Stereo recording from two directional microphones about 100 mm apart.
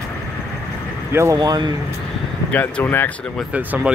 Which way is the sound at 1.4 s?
45° right (ahead or behind).